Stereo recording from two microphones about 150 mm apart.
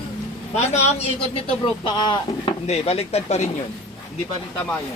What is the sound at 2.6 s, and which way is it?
Speech, 45° left (ahead or behind).